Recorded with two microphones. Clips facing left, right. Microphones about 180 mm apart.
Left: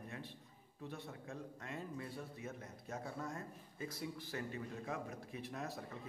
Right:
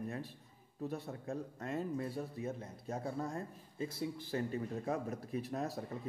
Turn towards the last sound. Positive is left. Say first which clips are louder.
# right 6 dB
turn(degrees=-35)  # may be behind; listen again after turning